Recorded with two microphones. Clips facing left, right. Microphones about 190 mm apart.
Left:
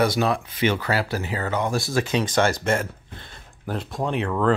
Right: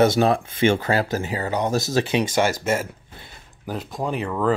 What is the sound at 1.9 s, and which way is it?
Speech, 20° right (ahead or behind).